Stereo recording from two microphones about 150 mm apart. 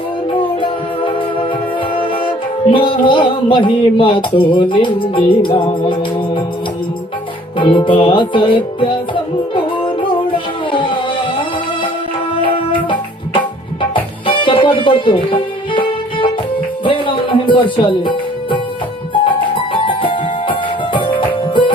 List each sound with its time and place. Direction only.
0.3 s music: 35° left (ahead or behind)
7.6 s music: 35° left (ahead or behind)
12.4 s music: 35° left (ahead or behind)
19.7 s music: 35° left (ahead or behind)